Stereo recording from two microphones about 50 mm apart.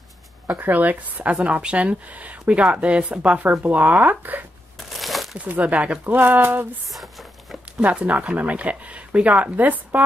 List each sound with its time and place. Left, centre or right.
0.6 s speech: right
4.9 s crumpling: centre
5.4 s speech: right
6.0 s speech: right
7.8 s speech: right